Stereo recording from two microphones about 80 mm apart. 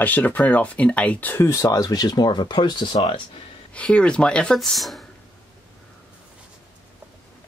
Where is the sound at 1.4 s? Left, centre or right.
Left.